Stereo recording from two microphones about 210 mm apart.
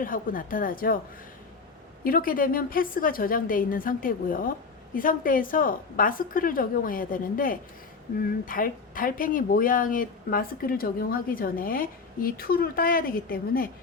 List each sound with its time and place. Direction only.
0.0 s a woman's voice: 40° left (ahead or behind)
2.0 s a woman's voice: 45° left (ahead or behind)